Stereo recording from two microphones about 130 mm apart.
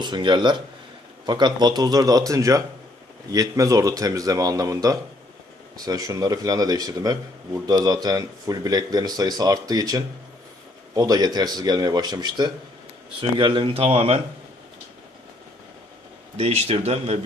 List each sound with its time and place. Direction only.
0.0 s speech: 35° right (ahead or behind)
16.4 s speech: 55° right (ahead or behind)